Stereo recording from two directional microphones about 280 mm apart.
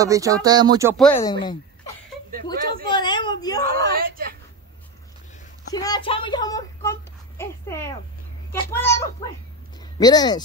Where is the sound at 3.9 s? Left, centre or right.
Right.